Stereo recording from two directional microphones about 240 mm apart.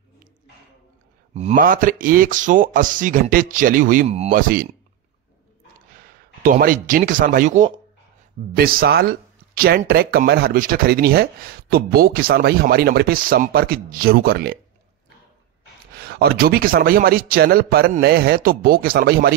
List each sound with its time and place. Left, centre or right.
1.3 s speech: right
5.9 s speech: right
15.9 s speech: right